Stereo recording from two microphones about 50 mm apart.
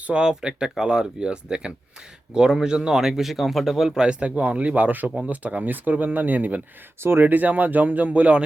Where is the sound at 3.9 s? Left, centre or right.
Right.